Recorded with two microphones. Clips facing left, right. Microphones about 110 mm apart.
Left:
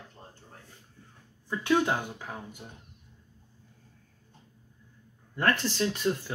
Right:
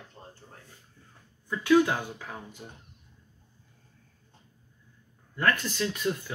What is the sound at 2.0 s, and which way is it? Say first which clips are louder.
Speech: even; 15° left (ahead or behind).